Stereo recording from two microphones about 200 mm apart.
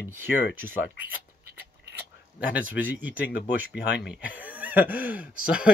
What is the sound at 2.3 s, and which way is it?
Speech, 10° right (ahead or behind).